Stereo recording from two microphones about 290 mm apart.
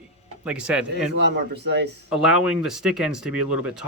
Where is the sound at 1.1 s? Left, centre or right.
Right.